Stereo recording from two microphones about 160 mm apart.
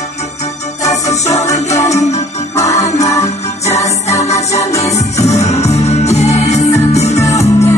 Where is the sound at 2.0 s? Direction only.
45° left (ahead or behind).